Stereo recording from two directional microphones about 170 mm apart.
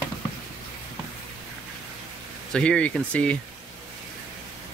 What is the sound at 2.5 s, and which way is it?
Speech, 5° left (ahead or behind).